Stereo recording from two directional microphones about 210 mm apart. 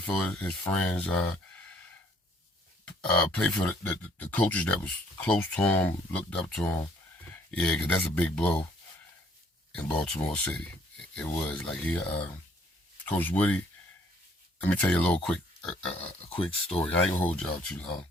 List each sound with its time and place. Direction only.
0.0 s speech: 5° left (ahead or behind)
2.8 s speech: 5° left (ahead or behind)
10.0 s speech: 5° left (ahead or behind)
15.9 s speech: 30° left (ahead or behind)
17.2 s speech: 5° left (ahead or behind)